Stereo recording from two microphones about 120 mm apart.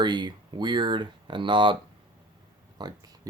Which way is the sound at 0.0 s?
35° right (ahead or behind).